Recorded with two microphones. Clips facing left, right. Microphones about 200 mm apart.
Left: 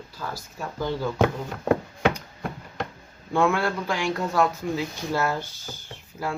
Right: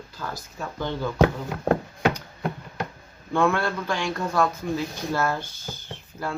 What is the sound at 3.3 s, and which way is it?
Speech, 15° left (ahead or behind).